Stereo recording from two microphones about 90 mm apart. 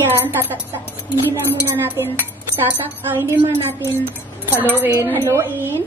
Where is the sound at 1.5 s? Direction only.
20° right (ahead or behind).